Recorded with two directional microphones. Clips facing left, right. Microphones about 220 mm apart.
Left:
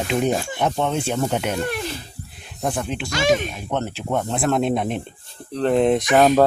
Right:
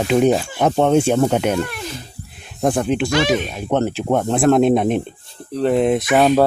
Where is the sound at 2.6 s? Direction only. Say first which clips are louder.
Right 8 dB; 55° right (ahead or behind).